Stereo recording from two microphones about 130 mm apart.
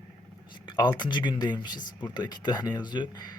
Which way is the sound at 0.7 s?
35° left (ahead or behind).